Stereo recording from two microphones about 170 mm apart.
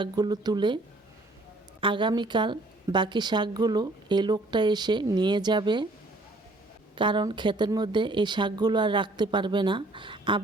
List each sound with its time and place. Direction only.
0.0 s a woman's voice: 25° right (ahead or behind)
1.8 s a woman's voice: 30° right (ahead or behind)
6.9 s a woman's voice: 30° right (ahead or behind)